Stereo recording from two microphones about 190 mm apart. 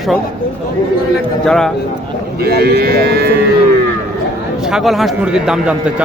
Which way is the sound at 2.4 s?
55° right (ahead or behind).